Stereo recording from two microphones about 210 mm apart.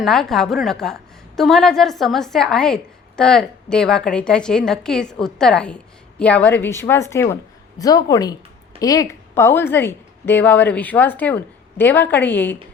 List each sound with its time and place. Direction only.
0.0 s a woman's voice: centre (ahead or behind)